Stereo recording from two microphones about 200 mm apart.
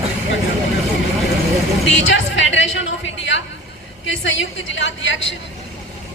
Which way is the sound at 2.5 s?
70° left (ahead or behind).